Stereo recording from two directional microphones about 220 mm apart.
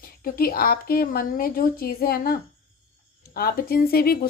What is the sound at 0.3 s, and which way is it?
Speech, 45° left (ahead or behind).